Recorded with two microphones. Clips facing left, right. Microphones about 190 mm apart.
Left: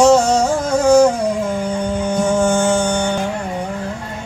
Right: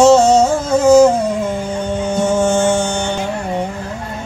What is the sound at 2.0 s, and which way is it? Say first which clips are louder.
Music: right 1 dB; 25° right (ahead or behind).